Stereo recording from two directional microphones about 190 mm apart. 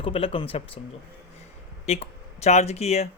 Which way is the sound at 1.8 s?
35° left (ahead or behind).